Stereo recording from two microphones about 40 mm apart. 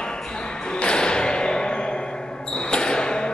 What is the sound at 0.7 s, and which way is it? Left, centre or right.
Music, left.